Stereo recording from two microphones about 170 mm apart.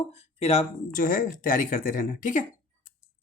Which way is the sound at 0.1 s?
40° left (ahead or behind).